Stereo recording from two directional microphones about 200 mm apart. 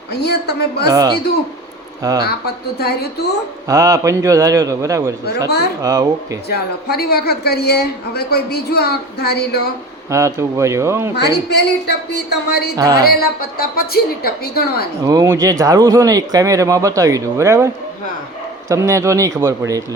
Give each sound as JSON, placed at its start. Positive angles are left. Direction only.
{"t": 0.1, "sound": "a woman's voice", "side_deg": 55}
{"t": 0.9, "sound": "speech", "side_deg": -20}
{"t": 2.7, "sound": "a woman's voice", "side_deg": 50}
{"t": 3.7, "sound": "speech", "side_deg": -15}
{"t": 5.5, "sound": "a woman's voice", "side_deg": 55}
{"t": 5.8, "sound": "speech", "side_deg": -20}
{"t": 6.5, "sound": "a woman's voice", "side_deg": 50}
{"t": 10.1, "sound": "speech", "side_deg": -15}
{"t": 11.4, "sound": "a woman's voice", "side_deg": 55}
{"t": 12.7, "sound": "speech", "side_deg": -20}
{"t": 13.0, "sound": "a woman's voice", "side_deg": 50}
{"t": 15.0, "sound": "speech", "side_deg": -15}
{"t": 18.7, "sound": "speech", "side_deg": -15}